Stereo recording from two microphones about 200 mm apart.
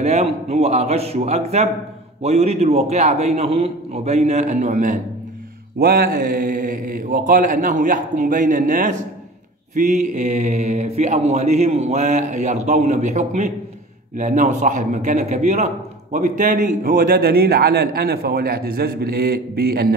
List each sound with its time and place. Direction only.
0.0 s a man's voice: 30° right (ahead or behind); by 19.9 s 50° right (ahead or behind)